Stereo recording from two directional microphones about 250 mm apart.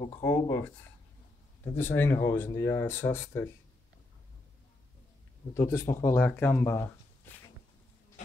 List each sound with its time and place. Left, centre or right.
0.0 s speech: centre
1.8 s speech: centre
5.5 s speech: centre